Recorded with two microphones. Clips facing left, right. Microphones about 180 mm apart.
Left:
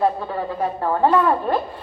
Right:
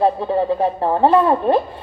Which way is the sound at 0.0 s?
25° right (ahead or behind).